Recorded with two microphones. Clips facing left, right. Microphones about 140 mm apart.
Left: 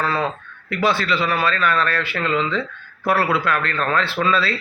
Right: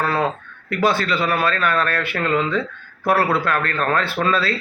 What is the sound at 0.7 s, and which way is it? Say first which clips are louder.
Speech: right 1 dB; 45° right (ahead or behind).